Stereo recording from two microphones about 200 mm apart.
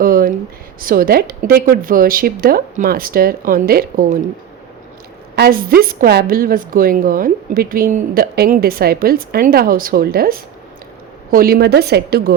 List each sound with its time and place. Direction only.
0.0 s a sound: 45° right (ahead or behind)
0.8 s a woman's voice: 45° right (ahead or behind)
5.4 s a woman's voice: 45° right (ahead or behind)